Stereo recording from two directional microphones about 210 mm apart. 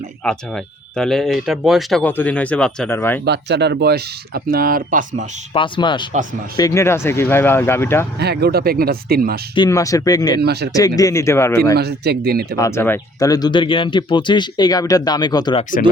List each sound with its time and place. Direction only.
0.3 s speech: 5° left (ahead or behind)
3.2 s speech: 55° right (ahead or behind)
5.5 s speech: 25° left (ahead or behind)
8.2 s speech: 50° right (ahead or behind)
9.6 s speech: 15° left (ahead or behind)
10.4 s speech: 50° right (ahead or behind)
10.7 s speech: 15° left (ahead or behind)
11.8 s speech: 50° right (ahead or behind)
12.5 s speech: 15° left (ahead or behind)